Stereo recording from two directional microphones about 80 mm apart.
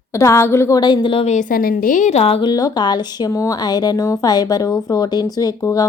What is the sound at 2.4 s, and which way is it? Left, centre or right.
Speech, left.